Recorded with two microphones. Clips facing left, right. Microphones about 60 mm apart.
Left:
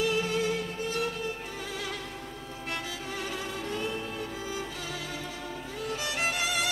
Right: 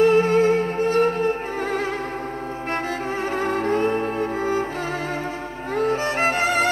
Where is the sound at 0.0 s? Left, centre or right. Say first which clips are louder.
Right 12 dB; right.